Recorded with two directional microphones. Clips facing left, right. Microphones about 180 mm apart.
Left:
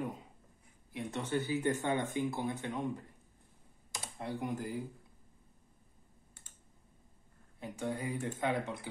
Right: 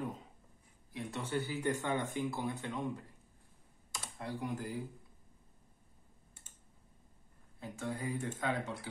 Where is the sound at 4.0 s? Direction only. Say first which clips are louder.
Left 2 dB; 20° left (ahead or behind).